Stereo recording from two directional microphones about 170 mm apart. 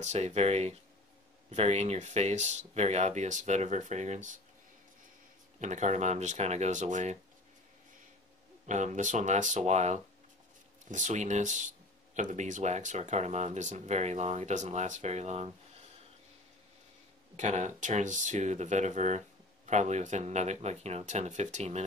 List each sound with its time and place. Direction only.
0.0 s speech: 40° right (ahead or behind)
5.6 s speech: 45° right (ahead or behind)
8.6 s speech: 45° right (ahead or behind)
17.4 s speech: 45° right (ahead or behind)